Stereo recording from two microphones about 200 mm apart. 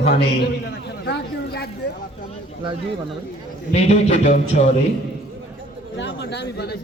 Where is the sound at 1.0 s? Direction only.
55° left (ahead or behind).